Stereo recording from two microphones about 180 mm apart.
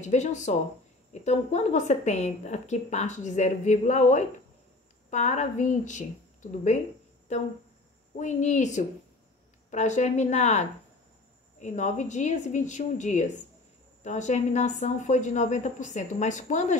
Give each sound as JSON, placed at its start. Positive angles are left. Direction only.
{"t": 0.0, "sound": "a woman's voice", "side_deg": 40}
{"t": 8.2, "sound": "a woman's voice", "side_deg": 40}